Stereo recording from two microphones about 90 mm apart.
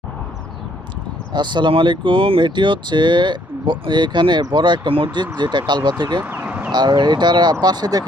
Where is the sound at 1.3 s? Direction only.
55° right (ahead or behind).